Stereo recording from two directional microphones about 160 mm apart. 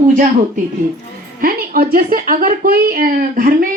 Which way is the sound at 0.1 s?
55° right (ahead or behind).